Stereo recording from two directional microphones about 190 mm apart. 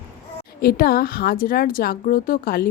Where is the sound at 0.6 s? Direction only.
50° left (ahead or behind).